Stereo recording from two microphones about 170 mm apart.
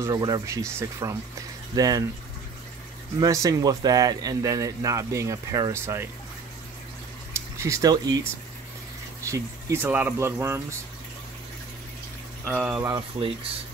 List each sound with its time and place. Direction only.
0.0 s speech: 20° right (ahead or behind)
3.2 s speech: 20° right (ahead or behind)
7.3 s speech: 15° right (ahead or behind)
9.3 s speech: 15° right (ahead or behind)
12.5 s speech: 10° right (ahead or behind)
12.9 s speech: 35° right (ahead or behind)